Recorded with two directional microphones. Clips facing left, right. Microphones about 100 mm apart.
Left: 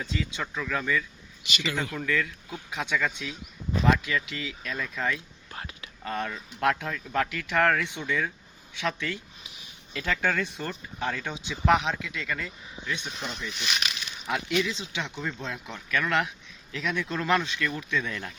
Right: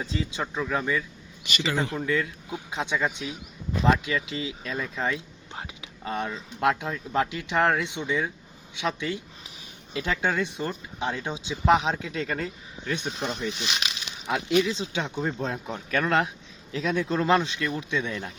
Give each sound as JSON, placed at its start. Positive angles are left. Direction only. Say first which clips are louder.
{"t": 0.0, "sound": "speech", "louder": "right 2 dB", "side_deg": -30}
{"t": 13.5, "sound": "speech", "louder": "right 1 dB", "side_deg": -30}